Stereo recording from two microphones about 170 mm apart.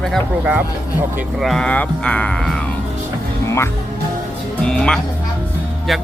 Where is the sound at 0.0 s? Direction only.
Centre (ahead or behind).